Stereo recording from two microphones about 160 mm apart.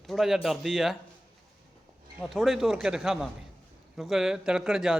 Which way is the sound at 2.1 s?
Centre (ahead or behind).